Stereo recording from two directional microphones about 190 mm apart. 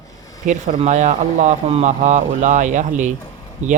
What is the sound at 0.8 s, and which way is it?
Speech, 40° right (ahead or behind).